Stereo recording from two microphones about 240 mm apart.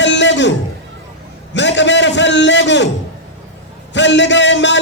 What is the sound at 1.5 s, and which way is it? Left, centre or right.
A man's voice, left.